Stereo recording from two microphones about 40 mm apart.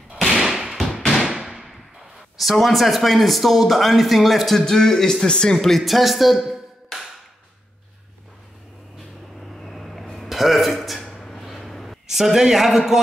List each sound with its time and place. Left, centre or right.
0.3 s thump: centre
1.2 s a sound: centre
2.3 s speech: centre
5.2 s speech: left
5.5 s speech: centre
6.9 s clapping: centre
9.4 s vehicle: centre
10.1 s a sound: centre
12.1 s a man's voice: centre